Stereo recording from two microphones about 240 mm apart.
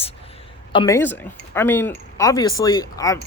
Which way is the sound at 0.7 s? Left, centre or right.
Centre.